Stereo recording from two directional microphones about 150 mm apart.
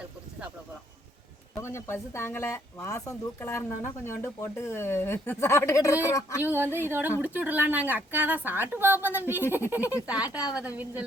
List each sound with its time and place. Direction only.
1.6 s speech: 15° left (ahead or behind)
6.4 s a woman's voice: 15° right (ahead or behind)